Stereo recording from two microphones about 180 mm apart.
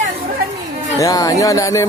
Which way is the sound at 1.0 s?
20° left (ahead or behind).